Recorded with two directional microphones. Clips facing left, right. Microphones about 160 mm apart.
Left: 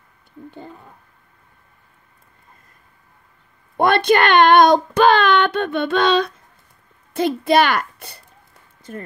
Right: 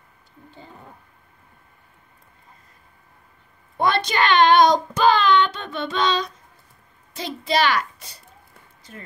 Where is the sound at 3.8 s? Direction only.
55° left (ahead or behind).